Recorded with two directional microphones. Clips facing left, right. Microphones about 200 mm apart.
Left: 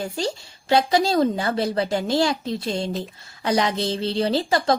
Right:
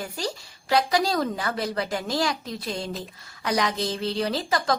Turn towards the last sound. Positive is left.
turn(degrees=30)  # may be behind; listen again after turning